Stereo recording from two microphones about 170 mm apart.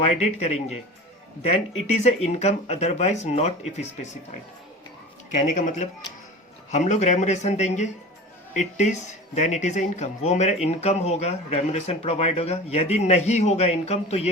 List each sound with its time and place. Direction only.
0.0 s speech: 40° left (ahead or behind)
5.3 s speech: 45° left (ahead or behind)